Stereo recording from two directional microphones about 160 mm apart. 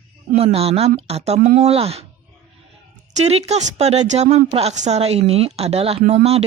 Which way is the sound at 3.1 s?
45° right (ahead or behind).